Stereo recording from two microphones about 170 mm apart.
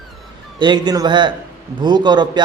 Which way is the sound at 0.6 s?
25° right (ahead or behind).